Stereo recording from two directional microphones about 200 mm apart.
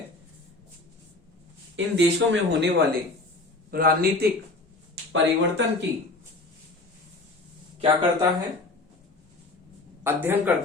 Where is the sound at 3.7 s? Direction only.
45° right (ahead or behind).